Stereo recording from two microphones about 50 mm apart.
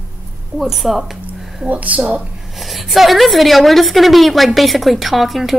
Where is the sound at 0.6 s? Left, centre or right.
Centre.